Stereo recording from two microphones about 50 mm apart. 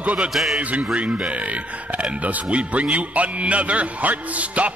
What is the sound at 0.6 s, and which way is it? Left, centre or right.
Speech, right.